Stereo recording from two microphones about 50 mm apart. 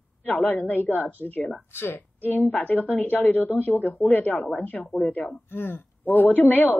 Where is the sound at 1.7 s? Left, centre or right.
Left.